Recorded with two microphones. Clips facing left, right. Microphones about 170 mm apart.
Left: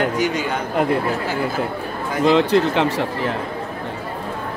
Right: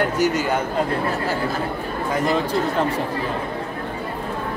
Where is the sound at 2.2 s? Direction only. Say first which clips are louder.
Left 7 dB; 75° left (ahead or behind).